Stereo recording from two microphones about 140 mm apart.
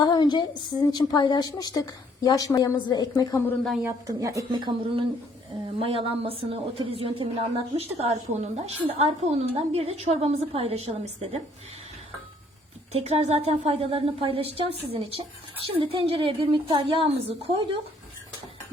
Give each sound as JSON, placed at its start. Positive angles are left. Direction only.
{"t": 0.0, "sound": "a sound", "side_deg": 30}
{"t": 0.9, "sound": "a woman's voice", "side_deg": 30}
{"t": 3.4, "sound": "speech", "side_deg": 5}
{"t": 3.8, "sound": "a woman's voice", "side_deg": -25}
{"t": 12.9, "sound": "a woman's voice", "side_deg": -45}